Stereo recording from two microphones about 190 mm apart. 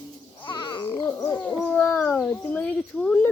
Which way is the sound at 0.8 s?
15° left (ahead or behind).